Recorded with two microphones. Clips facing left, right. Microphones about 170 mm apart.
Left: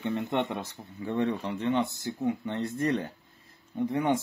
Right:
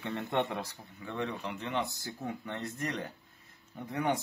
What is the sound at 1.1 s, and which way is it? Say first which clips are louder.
Speech: left 7 dB; 35° left (ahead or behind).